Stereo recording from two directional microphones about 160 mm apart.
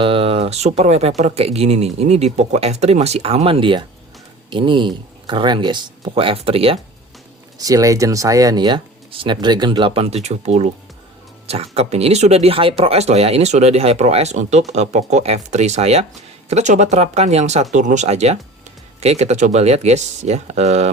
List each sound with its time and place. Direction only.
0.0 s speech: 35° right (ahead or behind)
7.6 s speech: 20° right (ahead or behind); by 20.9 s 45° right (ahead or behind)